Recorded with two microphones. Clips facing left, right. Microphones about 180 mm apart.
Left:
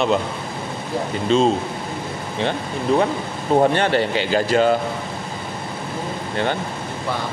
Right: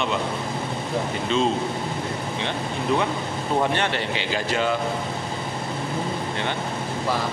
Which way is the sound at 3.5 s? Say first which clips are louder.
Left 7 dB; 40° left (ahead or behind).